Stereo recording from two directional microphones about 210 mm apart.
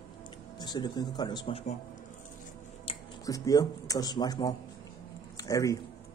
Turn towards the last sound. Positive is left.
turn(degrees=15)  # may be behind; listen again after turning